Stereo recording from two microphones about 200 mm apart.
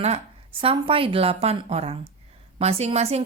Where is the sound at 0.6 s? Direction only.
25° right (ahead or behind).